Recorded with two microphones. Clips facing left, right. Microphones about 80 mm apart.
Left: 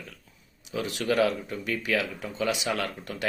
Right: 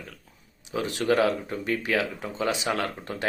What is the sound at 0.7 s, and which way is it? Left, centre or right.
Speech, right.